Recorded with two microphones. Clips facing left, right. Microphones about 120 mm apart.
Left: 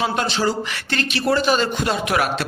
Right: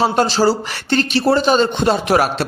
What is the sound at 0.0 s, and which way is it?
A man's voice, 35° right (ahead or behind).